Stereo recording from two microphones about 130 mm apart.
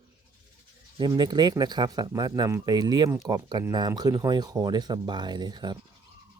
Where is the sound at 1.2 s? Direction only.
35° right (ahead or behind).